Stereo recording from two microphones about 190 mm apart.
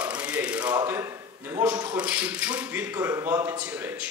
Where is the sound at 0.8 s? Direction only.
15° right (ahead or behind).